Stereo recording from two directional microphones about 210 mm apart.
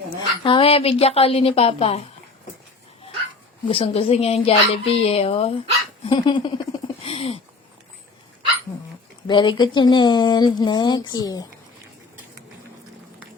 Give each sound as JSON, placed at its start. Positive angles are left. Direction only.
{"t": 0.4, "sound": "speech", "side_deg": 25}
{"t": 3.7, "sound": "speech", "side_deg": 25}
{"t": 9.2, "sound": "speech", "side_deg": 20}